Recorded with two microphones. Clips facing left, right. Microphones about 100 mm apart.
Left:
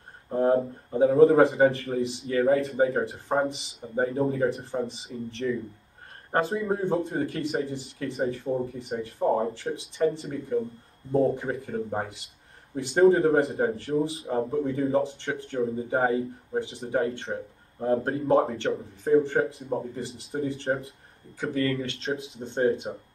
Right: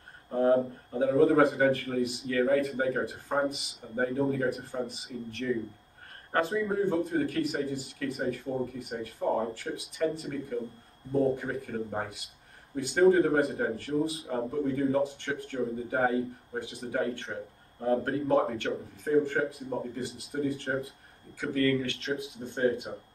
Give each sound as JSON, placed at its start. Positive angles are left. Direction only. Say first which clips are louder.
{"t": 0.3, "sound": "speech", "louder": "left 2 dB", "side_deg": 25}